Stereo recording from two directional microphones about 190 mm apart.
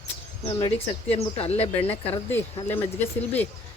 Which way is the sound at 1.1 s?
35° left (ahead or behind).